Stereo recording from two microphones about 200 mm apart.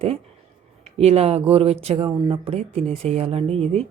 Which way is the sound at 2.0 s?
20° right (ahead or behind).